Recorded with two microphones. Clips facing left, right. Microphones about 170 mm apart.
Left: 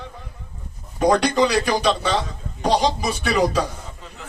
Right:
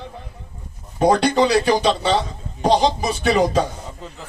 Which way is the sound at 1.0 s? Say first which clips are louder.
Right 1 dB; 30° right (ahead or behind).